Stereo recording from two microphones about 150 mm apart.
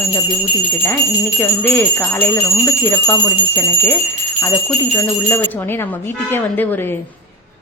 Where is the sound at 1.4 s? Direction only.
15° left (ahead or behind).